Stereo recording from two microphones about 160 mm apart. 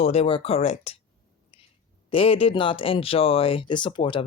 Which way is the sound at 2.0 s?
35° left (ahead or behind).